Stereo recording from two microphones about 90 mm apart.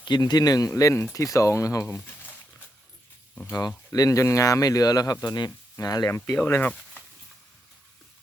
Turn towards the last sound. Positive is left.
turn(degrees=15)  # may be behind; listen again after turning